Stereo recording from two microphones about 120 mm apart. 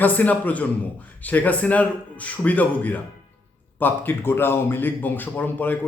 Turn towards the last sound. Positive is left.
turn(degrees=15)  # may be behind; listen again after turning